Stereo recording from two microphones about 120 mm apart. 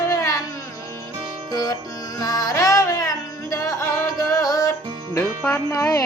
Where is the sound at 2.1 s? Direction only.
30° left (ahead or behind).